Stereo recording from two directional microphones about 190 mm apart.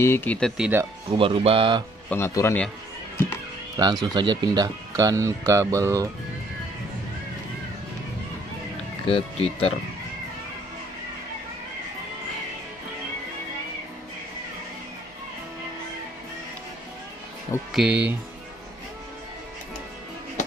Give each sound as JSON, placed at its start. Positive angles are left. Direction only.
{"t": 0.0, "sound": "a man's voice", "side_deg": 10}
{"t": 0.6, "sound": "speech", "side_deg": -10}
{"t": 1.1, "sound": "speech", "side_deg": -30}
{"t": 2.0, "sound": "a man's voice", "side_deg": 15}
{"t": 3.7, "sound": "speech", "side_deg": -20}
{"t": 9.0, "sound": "speech", "side_deg": 30}
{"t": 17.7, "sound": "speech", "side_deg": -5}